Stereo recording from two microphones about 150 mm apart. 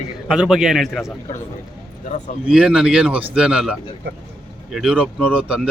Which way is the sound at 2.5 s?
5° right (ahead or behind).